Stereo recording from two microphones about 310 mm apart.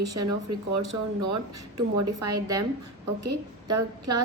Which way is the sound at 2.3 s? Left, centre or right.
Centre.